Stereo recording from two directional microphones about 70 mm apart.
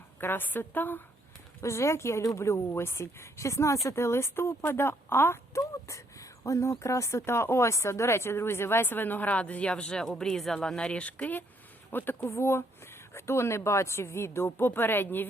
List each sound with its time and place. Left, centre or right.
0.2 s a woman's voice: left
1.6 s speech: left
5.5 s speech: left